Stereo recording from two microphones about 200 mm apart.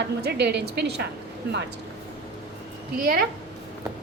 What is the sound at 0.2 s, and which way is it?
Speech, 55° right (ahead or behind).